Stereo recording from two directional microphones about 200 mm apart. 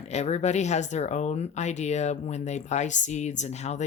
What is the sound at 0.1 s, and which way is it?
Speech, 35° left (ahead or behind).